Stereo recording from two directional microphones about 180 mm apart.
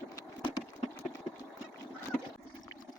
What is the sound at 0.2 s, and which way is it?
Horse, 20° left (ahead or behind).